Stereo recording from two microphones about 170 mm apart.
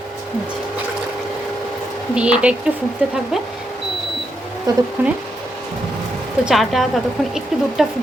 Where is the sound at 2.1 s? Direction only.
5° right (ahead or behind).